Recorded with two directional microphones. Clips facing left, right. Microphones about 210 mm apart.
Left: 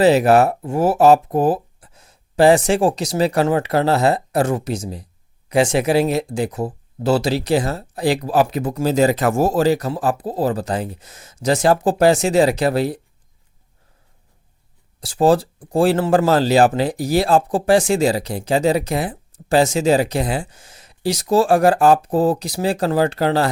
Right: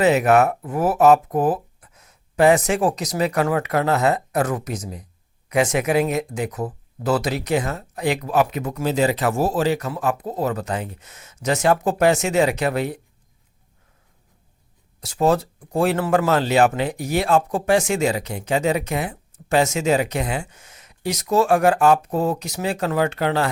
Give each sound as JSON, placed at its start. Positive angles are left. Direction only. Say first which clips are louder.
{"t": 0.0, "sound": "speech", "louder": "left 3 dB", "side_deg": 30}
{"t": 15.0, "sound": "speech", "louder": "left 4 dB", "side_deg": 30}